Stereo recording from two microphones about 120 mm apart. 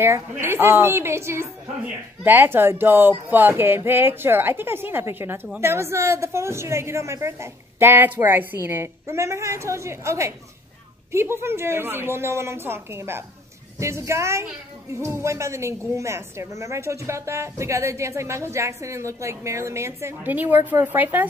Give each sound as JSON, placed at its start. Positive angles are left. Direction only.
{"t": 0.0, "sound": "speech", "side_deg": -20}